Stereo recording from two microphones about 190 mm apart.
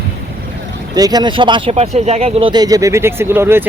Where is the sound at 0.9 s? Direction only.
20° right (ahead or behind).